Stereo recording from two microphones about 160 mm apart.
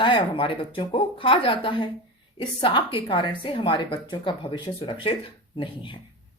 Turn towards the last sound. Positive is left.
turn(degrees=30)  # may be behind; listen again after turning